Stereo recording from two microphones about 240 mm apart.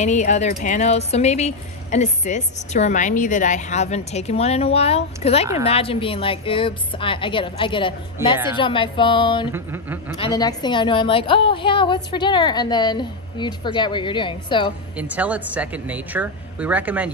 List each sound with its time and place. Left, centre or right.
0.0 s a woman's voice: left
9.5 s speech: centre
10.2 s a woman's voice: centre
15.0 s speech: centre